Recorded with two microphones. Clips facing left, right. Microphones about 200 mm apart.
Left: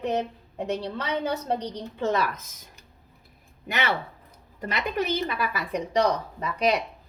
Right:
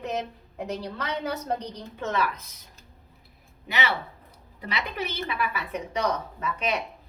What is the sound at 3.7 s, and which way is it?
A woman's voice, 50° left (ahead or behind).